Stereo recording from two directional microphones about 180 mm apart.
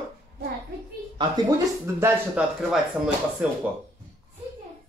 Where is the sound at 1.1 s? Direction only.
25° right (ahead or behind).